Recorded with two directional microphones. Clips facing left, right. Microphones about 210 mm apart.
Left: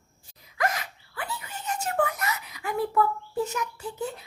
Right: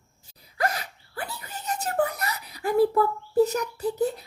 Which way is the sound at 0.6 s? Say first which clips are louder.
Right 1 dB; 35° right (ahead or behind).